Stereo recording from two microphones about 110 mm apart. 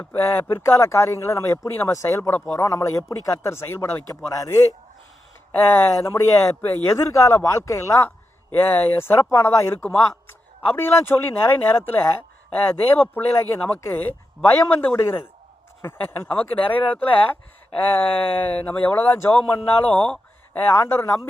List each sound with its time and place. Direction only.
0.0 s speech: 20° left (ahead or behind)
19.9 s a sound: 10° left (ahead or behind)
20.7 s speech: 20° left (ahead or behind)